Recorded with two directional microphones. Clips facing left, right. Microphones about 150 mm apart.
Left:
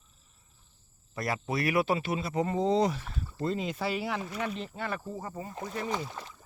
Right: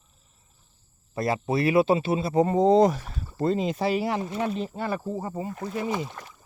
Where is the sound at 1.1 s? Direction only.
25° right (ahead or behind).